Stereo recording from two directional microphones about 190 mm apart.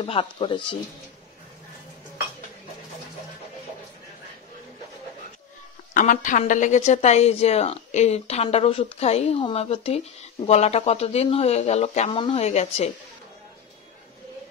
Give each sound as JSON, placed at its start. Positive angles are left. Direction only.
{"t": 0.0, "sound": "speech", "side_deg": 25}
{"t": 5.9, "sound": "a woman's voice", "side_deg": 45}